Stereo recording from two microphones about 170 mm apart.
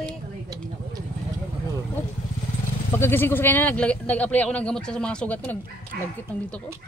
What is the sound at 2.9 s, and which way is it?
A man's voice, 15° left (ahead or behind).